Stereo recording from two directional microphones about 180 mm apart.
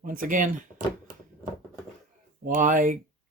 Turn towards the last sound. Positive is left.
turn(degrees=-45)  # may be behind; listen again after turning